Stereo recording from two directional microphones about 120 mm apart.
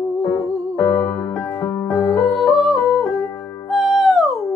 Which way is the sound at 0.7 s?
15° left (ahead or behind).